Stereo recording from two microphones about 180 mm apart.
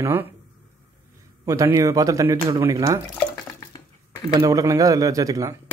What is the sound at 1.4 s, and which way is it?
Speech, 15° right (ahead or behind).